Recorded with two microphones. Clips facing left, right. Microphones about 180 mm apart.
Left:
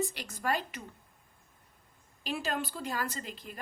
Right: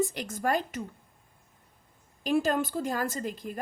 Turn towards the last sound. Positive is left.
turn(degrees=-45)  # may be behind; listen again after turning